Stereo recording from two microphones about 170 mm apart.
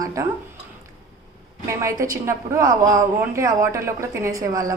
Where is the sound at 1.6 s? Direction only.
15° right (ahead or behind).